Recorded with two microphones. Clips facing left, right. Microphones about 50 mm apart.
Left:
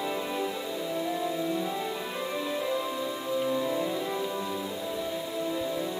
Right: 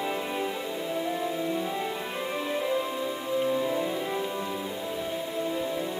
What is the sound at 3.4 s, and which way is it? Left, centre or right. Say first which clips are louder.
Music: right 2 dB; centre.